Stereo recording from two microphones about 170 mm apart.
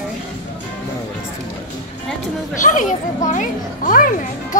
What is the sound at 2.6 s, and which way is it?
A child's voice, 50° left (ahead or behind).